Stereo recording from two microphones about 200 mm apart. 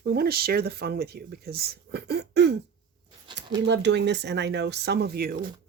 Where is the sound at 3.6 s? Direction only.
60° right (ahead or behind).